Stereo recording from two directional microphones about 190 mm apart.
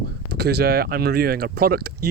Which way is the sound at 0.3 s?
60° right (ahead or behind).